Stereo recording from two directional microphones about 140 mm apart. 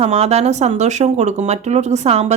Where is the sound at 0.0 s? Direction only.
50° right (ahead or behind).